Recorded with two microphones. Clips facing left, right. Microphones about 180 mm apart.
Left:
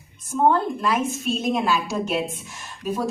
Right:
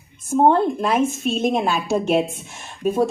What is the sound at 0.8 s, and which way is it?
Speech, 50° right (ahead or behind).